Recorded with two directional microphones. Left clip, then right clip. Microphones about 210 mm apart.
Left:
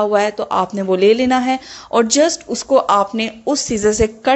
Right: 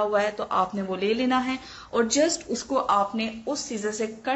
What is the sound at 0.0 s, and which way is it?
A woman's voice, 35° left (ahead or behind).